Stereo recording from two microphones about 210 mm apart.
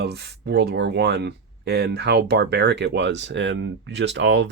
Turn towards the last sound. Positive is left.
turn(degrees=-55)  # may be behind; listen again after turning